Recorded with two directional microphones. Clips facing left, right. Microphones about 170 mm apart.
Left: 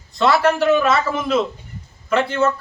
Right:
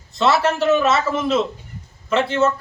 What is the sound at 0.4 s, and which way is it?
A man's voice, centre (ahead or behind).